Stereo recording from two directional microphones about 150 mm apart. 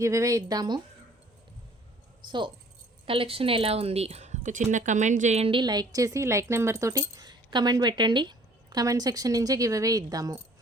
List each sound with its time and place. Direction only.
0.0 s a woman's voice: 20° right (ahead or behind)
2.2 s a woman's voice: 30° right (ahead or behind)